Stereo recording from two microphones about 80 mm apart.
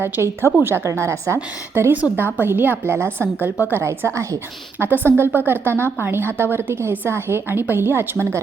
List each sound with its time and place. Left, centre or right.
0.0 s a woman's voice: right
4.8 s a woman's voice: right